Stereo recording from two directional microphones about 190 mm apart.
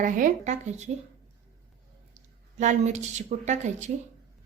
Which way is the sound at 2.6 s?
40° right (ahead or behind).